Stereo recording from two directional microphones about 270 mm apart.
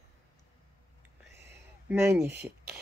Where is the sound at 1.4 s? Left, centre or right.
Centre.